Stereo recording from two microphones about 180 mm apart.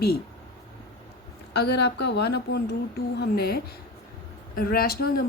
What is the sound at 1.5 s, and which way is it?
A woman's voice, 65° left (ahead or behind).